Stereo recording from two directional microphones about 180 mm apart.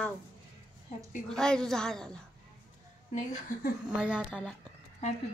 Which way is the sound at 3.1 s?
45° left (ahead or behind).